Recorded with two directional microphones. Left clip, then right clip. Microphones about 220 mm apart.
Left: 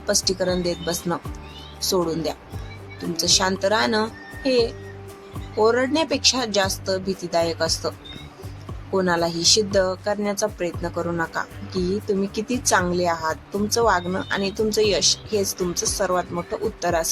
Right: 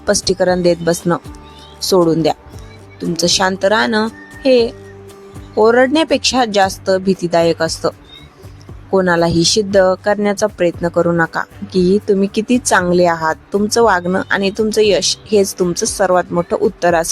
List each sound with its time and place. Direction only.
0.0 s speech: 40° right (ahead or behind)
3.2 s speech: 40° right (ahead or behind)